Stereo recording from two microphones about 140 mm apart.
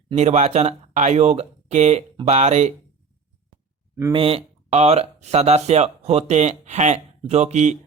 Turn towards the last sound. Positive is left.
turn(degrees=-55)  # may be behind; listen again after turning